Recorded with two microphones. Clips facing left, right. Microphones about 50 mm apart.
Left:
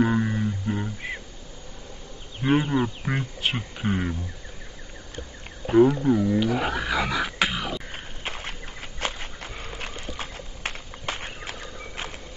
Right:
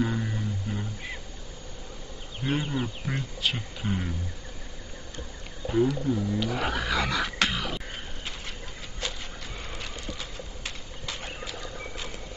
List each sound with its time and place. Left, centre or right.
0.0 s music: left
2.4 s speech: left
5.7 s speech: left
6.4 s speech: centre
7.9 s a sound: left
11.6 s clip-clop: left